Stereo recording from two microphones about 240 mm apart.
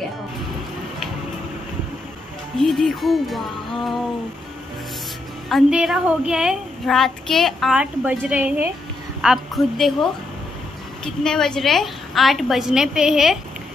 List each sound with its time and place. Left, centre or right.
2.5 s a woman's voice: centre
5.5 s a woman's voice: centre